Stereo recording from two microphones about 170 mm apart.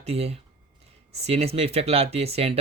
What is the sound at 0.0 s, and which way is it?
Speech, 40° right (ahead or behind).